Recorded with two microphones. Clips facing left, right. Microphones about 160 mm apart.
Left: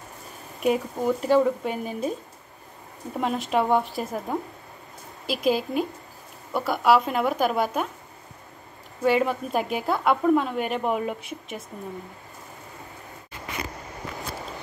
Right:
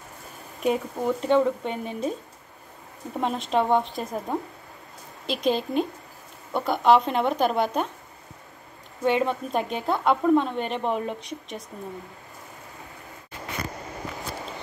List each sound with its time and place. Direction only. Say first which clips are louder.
0.6 s speech: left 1 dB; 5° left (ahead or behind)
3.2 s speech: even; 5° left (ahead or behind)
9.0 s speech: left 1 dB; 5° left (ahead or behind)